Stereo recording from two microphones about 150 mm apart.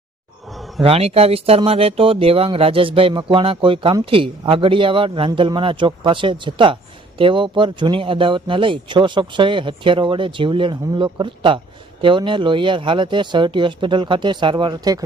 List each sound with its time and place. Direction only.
0.8 s speech: 40° right (ahead or behind)